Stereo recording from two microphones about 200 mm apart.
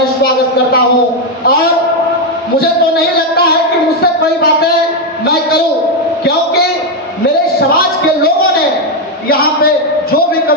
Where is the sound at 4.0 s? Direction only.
50° left (ahead or behind).